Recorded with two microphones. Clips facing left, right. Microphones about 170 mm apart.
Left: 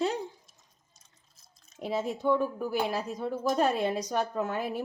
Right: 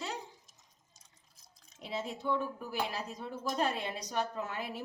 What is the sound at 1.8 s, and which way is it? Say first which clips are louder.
Speech: left 8 dB; 45° left (ahead or behind).